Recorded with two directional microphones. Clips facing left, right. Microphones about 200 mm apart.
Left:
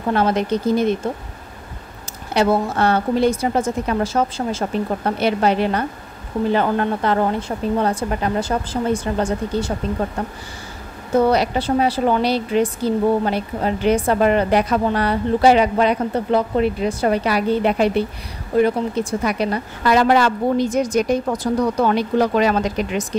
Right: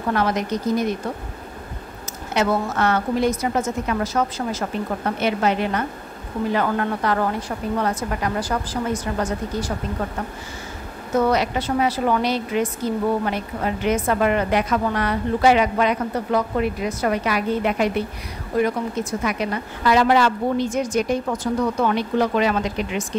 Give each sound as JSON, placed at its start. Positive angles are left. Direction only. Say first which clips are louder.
{"t": 0.1, "sound": "a woman's voice", "louder": "left 4 dB", "side_deg": 30}
{"t": 2.3, "sound": "a woman's voice", "louder": "left 3 dB", "side_deg": 30}
{"t": 11.1, "sound": "a woman's voice", "louder": "left 3 dB", "side_deg": 30}
{"t": 19.9, "sound": "a woman's voice", "louder": "left 2 dB", "side_deg": 45}